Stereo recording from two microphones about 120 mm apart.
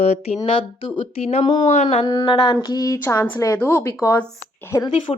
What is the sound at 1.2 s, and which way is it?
Speech, 60° left (ahead or behind).